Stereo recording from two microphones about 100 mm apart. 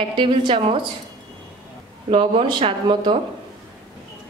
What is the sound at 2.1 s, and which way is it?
A woman's voice, 60° right (ahead or behind).